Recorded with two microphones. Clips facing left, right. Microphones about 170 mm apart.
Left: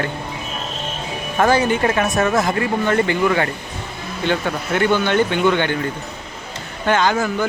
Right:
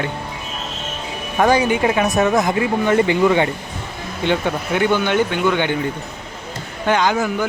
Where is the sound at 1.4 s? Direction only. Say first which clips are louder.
Right 1 dB; 10° right (ahead or behind).